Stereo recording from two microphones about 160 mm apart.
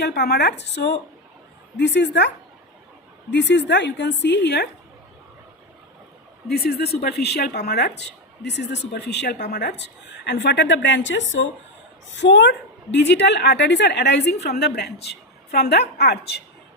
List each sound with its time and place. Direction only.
0.0 s a woman's voice: 90° left
3.3 s a woman's voice: 90° left
6.5 s a woman's voice: 85° left
12.1 s a woman's voice: 90° left